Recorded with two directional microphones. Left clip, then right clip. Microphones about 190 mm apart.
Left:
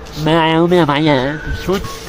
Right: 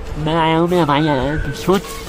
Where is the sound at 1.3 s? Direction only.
25° right (ahead or behind).